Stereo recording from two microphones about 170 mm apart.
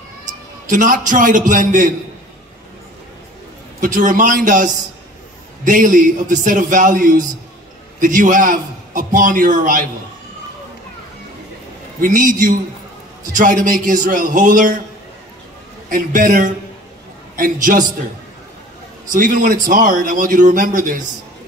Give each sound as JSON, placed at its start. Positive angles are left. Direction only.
{"t": 0.3, "sound": "a man's voice", "side_deg": -50}
{"t": 3.8, "sound": "a man's voice", "side_deg": -55}
{"t": 5.7, "sound": "a man's voice", "side_deg": -50}
{"t": 12.0, "sound": "a man's voice", "side_deg": -50}
{"t": 15.9, "sound": "a man's voice", "side_deg": -55}
{"t": 19.1, "sound": "a man's voice", "side_deg": -50}